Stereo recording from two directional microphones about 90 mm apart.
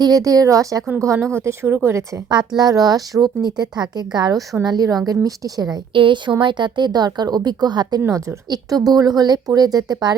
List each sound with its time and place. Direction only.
0.0 s a woman's voice: 40° right (ahead or behind)
2.6 s speech: 45° right (ahead or behind)
5.9 s a woman's voice: 65° right (ahead or behind); by 10.2 s 45° right (ahead or behind)